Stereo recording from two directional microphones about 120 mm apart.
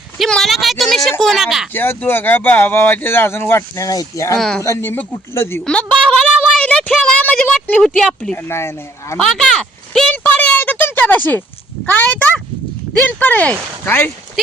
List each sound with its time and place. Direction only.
0.2 s a sound: centre (ahead or behind)
1.2 s speech: centre (ahead or behind)
1.7 s speech: 15° left (ahead or behind)
4.4 s speech: 5° left (ahead or behind)
4.6 s speech: 20° left (ahead or behind)
5.6 s a sound: 10° left (ahead or behind)
8.4 s speech: 20° left (ahead or behind)
9.1 s a sound: 5° left (ahead or behind)
11.9 s speech: 15° left (ahead or behind)